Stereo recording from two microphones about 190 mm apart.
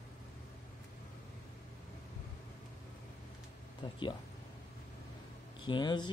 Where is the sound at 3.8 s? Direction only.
25° left (ahead or behind).